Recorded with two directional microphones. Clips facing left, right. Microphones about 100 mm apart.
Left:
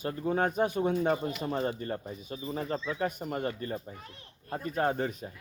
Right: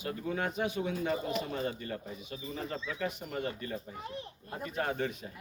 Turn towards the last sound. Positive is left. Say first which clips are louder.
# left 4 dB
turn(degrees=40)  # may be behind; listen again after turning